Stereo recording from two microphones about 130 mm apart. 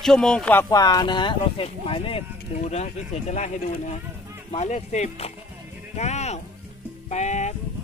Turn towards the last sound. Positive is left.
turn(degrees=65)  # may be behind; listen again after turning